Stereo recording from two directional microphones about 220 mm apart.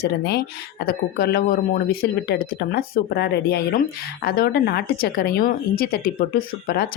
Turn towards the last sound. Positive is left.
turn(degrees=40)  # may be behind; listen again after turning